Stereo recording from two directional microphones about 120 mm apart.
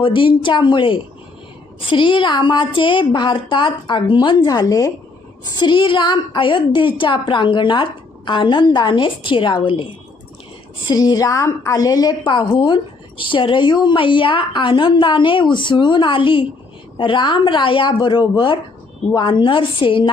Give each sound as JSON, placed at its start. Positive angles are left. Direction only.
{"t": 0.0, "sound": "a woman's voice", "side_deg": 45}
{"t": 5.5, "sound": "a woman's voice", "side_deg": 40}
{"t": 10.8, "sound": "a woman's voice", "side_deg": 35}